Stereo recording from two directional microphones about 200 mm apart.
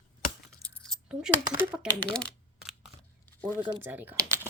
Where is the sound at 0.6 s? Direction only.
Centre (ahead or behind).